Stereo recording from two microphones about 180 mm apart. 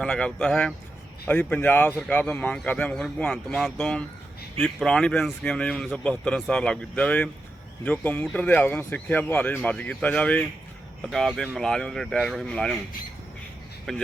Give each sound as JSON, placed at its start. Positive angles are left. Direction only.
{"t": 0.0, "sound": "speech", "side_deg": 5}
{"t": 13.9, "sound": "speech", "side_deg": 0}